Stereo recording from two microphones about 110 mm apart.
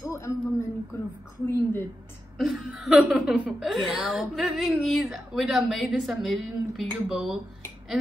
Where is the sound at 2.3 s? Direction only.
5° right (ahead or behind).